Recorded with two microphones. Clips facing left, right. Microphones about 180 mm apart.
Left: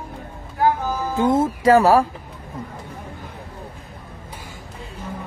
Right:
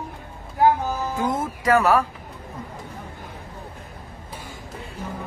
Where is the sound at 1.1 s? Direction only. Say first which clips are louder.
Left 7 dB; 25° left (ahead or behind).